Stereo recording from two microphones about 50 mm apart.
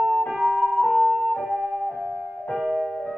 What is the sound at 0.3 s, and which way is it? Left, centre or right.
Music, right.